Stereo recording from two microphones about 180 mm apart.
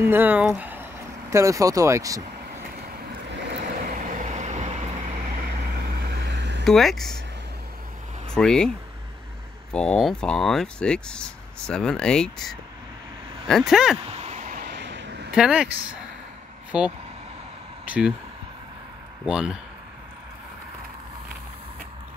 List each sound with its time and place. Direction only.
0.0 s speech: 10° right (ahead or behind)
3.8 s vehicle: 45° right (ahead or behind)
5.9 s vehicle: 70° right (ahead or behind)
6.6 s speech: centre (ahead or behind)
8.3 s speech: 5° left (ahead or behind)
14.0 s a sound: 35° right (ahead or behind)
14.7 s vehicle: 75° right (ahead or behind)
15.3 s speech: 5° right (ahead or behind)
16.7 s speech: 5° right (ahead or behind)
17.8 s vehicle: 5° right (ahead or behind)
19.2 s speech: 5° right (ahead or behind)